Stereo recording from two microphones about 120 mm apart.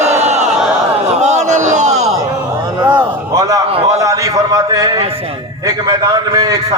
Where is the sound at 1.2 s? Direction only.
75° right (ahead or behind).